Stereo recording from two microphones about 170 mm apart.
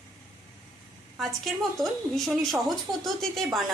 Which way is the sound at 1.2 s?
Centre (ahead or behind).